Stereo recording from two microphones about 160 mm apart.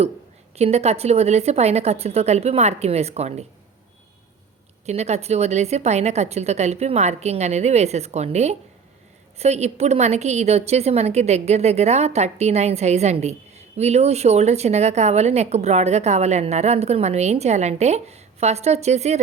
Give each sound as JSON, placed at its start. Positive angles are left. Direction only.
{"t": 0.5, "sound": "a woman's voice", "side_deg": -40}
{"t": 4.9, "sound": "a woman's voice", "side_deg": -45}